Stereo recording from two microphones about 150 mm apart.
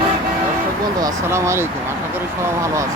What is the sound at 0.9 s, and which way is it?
Speech, 20° right (ahead or behind).